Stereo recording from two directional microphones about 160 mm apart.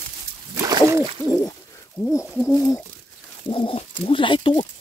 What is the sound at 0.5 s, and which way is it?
Pigeon, 20° right (ahead or behind).